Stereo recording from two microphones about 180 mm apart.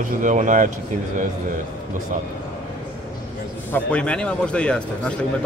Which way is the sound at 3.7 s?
5° left (ahead or behind).